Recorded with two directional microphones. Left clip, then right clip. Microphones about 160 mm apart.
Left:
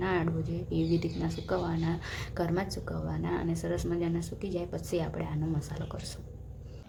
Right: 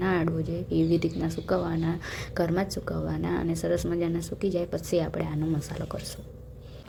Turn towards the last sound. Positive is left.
turn(degrees=-25)  # may be behind; listen again after turning